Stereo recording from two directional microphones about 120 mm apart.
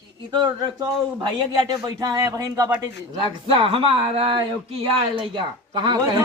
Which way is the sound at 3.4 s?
50° right (ahead or behind).